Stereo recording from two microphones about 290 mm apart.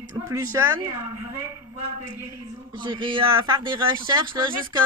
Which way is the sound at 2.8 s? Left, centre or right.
Centre.